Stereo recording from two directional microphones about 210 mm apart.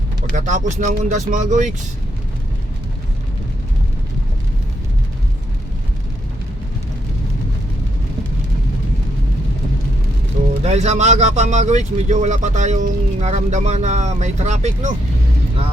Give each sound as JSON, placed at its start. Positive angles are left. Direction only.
{"t": 0.3, "sound": "a man's voice", "side_deg": -35}
{"t": 10.6, "sound": "a man's voice", "side_deg": -30}